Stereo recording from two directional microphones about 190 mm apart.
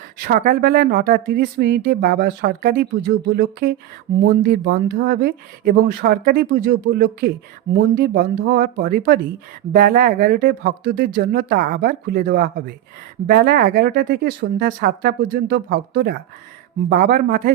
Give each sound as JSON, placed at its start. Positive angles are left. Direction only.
{"t": 0.2, "sound": "speech", "side_deg": -50}
{"t": 16.9, "sound": "speech", "side_deg": -45}